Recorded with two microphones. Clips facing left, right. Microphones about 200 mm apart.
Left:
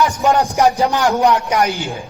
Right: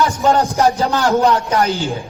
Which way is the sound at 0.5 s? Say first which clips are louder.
Left 1 dB; 15° left (ahead or behind).